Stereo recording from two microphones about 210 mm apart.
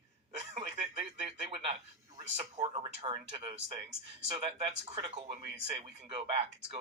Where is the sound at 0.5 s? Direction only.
30° right (ahead or behind).